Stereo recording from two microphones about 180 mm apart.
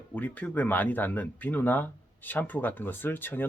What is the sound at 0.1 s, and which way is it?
Speech, 10° left (ahead or behind).